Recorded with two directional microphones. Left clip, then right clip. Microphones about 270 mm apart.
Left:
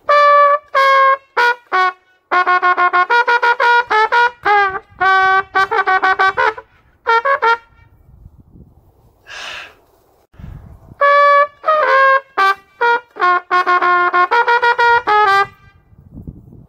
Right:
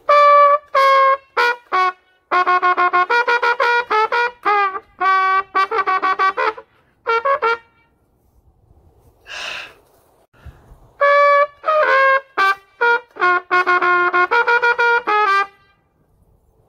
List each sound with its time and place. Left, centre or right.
0.0 s trumpet: centre
9.2 s gasp: right
11.0 s trumpet: centre